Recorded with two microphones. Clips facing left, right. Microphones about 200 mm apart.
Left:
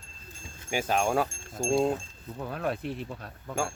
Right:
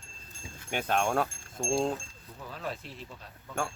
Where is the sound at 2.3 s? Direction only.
55° left (ahead or behind).